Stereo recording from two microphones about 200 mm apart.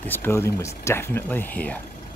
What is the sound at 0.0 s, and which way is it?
Speech, 10° left (ahead or behind).